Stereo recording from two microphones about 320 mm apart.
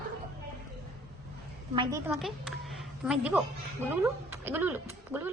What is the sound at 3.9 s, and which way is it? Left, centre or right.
Speech, centre.